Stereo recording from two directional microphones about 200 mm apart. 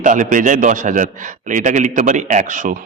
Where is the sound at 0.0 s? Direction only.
40° right (ahead or behind).